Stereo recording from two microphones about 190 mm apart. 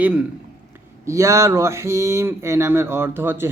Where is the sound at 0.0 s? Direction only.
5° right (ahead or behind).